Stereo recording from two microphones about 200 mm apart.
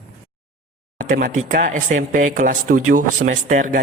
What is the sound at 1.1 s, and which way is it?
Speech, 45° right (ahead or behind).